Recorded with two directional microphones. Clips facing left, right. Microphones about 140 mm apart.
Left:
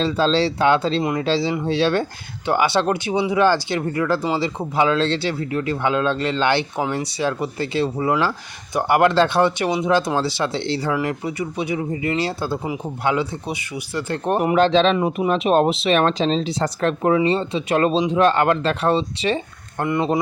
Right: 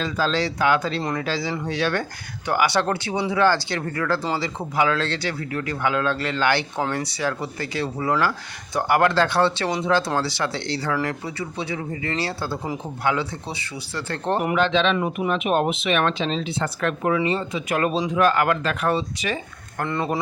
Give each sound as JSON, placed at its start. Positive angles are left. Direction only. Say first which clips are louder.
{"t": 0.0, "sound": "speech", "louder": "left 5 dB", "side_deg": 30}
{"t": 14.5, "sound": "speech", "louder": "left 6 dB", "side_deg": 40}
{"t": 14.9, "sound": "speech", "louder": "left 4 dB", "side_deg": 20}
{"t": 15.3, "sound": "speech", "louder": "left 5 dB", "side_deg": 35}